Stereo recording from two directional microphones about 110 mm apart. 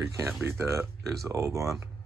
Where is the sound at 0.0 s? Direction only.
25° right (ahead or behind).